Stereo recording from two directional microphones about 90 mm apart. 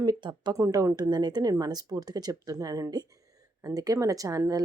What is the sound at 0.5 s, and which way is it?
Speech, 35° right (ahead or behind).